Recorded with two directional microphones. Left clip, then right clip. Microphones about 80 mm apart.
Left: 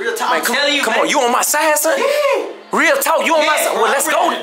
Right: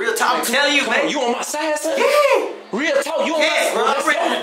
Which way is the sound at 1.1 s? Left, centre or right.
Left.